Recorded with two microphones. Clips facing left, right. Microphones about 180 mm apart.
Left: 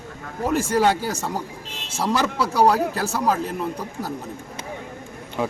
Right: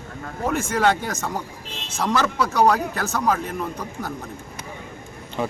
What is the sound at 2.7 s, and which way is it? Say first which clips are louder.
Speech: left 2 dB; 30° left (ahead or behind).